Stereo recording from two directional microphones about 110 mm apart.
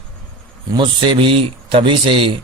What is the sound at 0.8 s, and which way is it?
Speech, 50° right (ahead or behind).